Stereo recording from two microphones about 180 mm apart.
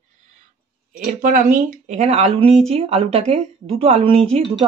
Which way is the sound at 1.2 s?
45° right (ahead or behind).